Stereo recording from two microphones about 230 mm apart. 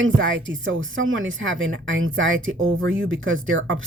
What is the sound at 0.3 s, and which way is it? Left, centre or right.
Speech, right.